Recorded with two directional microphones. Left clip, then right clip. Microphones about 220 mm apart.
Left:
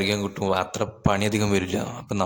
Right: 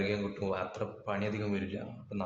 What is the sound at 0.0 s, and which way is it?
Speech, 45° left (ahead or behind).